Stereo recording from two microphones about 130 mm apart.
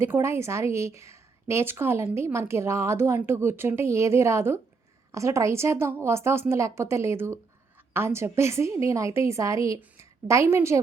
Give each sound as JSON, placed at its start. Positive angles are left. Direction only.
{"t": 0.0, "sound": "a woman's voice", "side_deg": -20}